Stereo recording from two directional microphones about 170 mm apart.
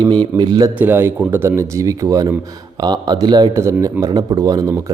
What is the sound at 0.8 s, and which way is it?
Speech, 10° right (ahead or behind).